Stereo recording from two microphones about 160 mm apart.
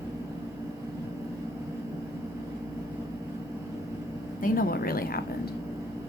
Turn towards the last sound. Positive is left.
turn(degrees=70)  # may be behind; listen again after turning